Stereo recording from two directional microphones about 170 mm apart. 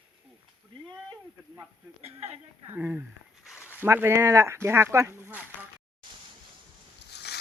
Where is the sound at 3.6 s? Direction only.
10° left (ahead or behind).